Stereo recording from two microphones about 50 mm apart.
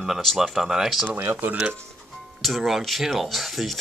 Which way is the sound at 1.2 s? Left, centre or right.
Right.